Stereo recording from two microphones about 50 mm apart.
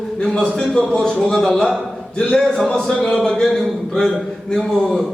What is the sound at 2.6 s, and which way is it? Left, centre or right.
A man's voice, centre.